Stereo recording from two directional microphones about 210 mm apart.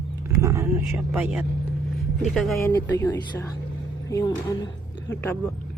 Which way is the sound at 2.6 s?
15° left (ahead or behind).